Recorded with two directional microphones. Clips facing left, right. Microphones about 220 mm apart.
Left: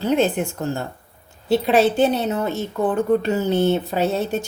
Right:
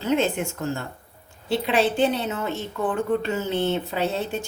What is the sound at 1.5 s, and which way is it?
A woman's voice, 40° left (ahead or behind).